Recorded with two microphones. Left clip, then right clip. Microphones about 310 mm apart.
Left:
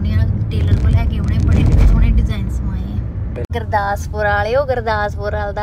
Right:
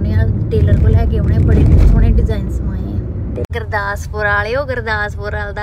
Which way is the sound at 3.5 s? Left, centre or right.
Centre.